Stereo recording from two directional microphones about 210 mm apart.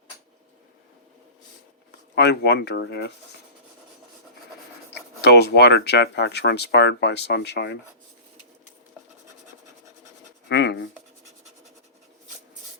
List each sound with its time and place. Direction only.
2.1 s speech: 55° left (ahead or behind)
5.2 s speech: 50° left (ahead or behind)
10.5 s speech: 55° left (ahead or behind)